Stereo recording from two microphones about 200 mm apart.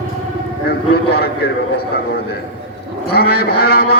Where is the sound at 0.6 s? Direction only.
50° left (ahead or behind).